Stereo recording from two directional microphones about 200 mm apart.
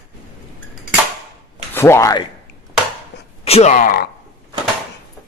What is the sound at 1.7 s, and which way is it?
Speech, 15° left (ahead or behind).